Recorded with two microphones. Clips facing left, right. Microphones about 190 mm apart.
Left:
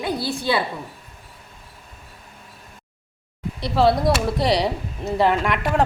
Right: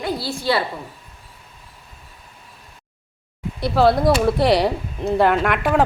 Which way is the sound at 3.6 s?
Centre (ahead or behind).